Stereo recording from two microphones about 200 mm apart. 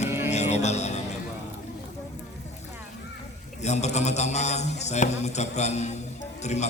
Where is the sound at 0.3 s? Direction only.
35° left (ahead or behind).